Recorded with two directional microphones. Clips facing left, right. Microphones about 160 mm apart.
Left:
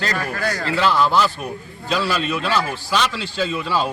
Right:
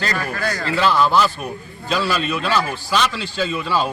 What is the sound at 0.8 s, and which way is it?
A man's voice, 5° right (ahead or behind).